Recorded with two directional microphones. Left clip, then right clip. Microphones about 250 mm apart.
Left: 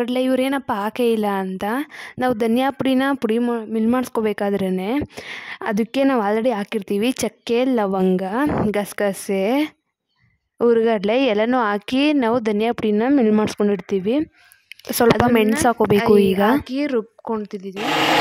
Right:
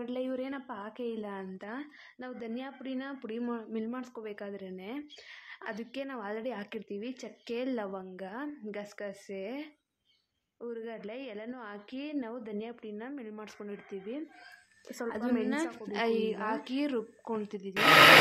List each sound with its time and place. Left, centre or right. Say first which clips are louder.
0.0 s a woman's voice: left 16 dB; left
15.9 s a woman's voice: left 12 dB; left